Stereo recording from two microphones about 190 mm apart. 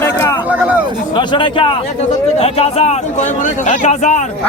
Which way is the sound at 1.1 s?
25° left (ahead or behind).